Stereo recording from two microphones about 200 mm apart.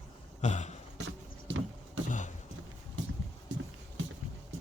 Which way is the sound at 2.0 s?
40° left (ahead or behind).